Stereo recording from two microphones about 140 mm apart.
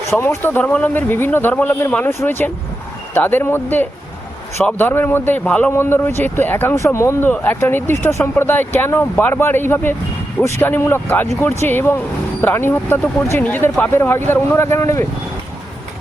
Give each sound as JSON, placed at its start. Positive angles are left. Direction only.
{"t": 0.1, "sound": "a man's voice", "side_deg": 20}